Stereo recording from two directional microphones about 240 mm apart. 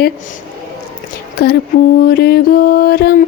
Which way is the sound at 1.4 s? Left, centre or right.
Left.